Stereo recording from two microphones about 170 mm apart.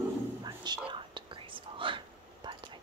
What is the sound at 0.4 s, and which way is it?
Whispering, 25° right (ahead or behind).